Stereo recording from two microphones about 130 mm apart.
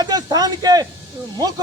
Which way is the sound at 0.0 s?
30° right (ahead or behind).